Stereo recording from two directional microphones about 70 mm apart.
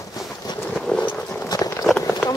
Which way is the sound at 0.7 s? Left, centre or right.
Centre.